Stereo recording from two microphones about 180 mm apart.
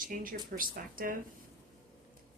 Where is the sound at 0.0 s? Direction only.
50° right (ahead or behind).